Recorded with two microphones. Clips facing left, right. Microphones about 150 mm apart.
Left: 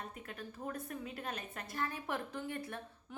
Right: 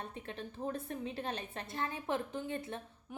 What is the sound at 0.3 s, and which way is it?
A woman's voice, 30° right (ahead or behind).